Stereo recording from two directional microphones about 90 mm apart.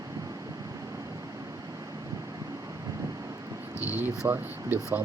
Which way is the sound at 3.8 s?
20° right (ahead or behind).